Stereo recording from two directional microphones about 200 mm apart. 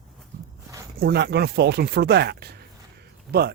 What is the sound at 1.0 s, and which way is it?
Speech, 55° right (ahead or behind).